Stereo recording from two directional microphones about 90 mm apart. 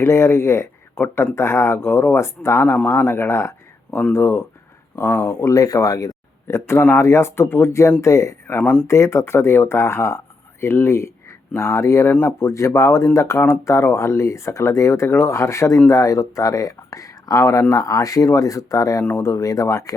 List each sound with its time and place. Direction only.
0.0 s speech: 30° left (ahead or behind)
5.5 s speech: 40° left (ahead or behind)